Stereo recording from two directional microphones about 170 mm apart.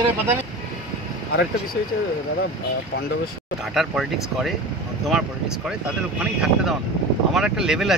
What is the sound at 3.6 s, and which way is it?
Speech, centre (ahead or behind).